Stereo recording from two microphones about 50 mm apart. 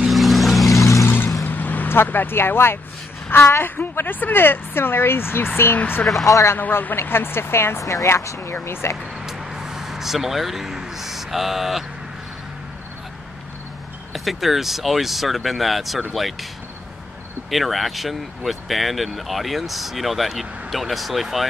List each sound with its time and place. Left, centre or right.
0.0 s vehicle: centre
1.0 s music: left
1.4 s vehicle: left
2.0 s speech: left
6.2 s speech: left
6.7 s speech: left
7.0 s speech: left
8.8 s speech: left
9.2 s vehicle: centre
14.1 s speech: centre
17.5 s speech: centre